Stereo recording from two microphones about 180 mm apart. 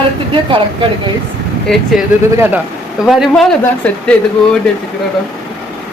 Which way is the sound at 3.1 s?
Centre (ahead or behind).